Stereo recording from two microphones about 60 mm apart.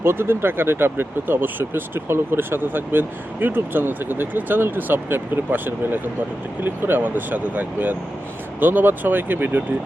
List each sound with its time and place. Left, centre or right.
0.0 s speech: right